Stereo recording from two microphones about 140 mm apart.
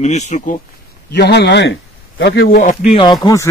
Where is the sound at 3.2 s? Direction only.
20° left (ahead or behind).